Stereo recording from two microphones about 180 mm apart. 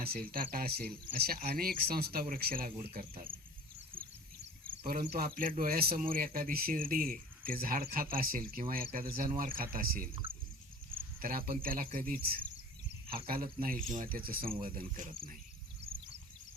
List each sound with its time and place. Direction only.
0.0 s speech: 60° right (ahead or behind)
3.9 s a sound: 10° right (ahead or behind)
4.9 s speech: 55° right (ahead or behind)
11.2 s speech: 55° right (ahead or behind)